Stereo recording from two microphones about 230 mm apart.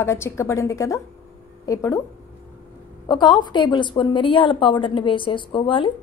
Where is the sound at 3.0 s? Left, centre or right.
Centre.